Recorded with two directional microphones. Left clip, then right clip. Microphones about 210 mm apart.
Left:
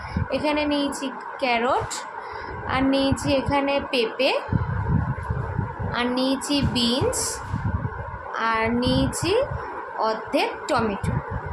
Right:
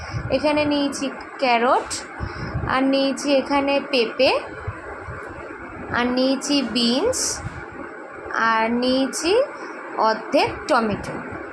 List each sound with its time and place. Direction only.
0.3 s a woman's voice: 15° right (ahead or behind)
5.9 s a woman's voice: 20° right (ahead or behind)
8.3 s a woman's voice: 20° right (ahead or behind)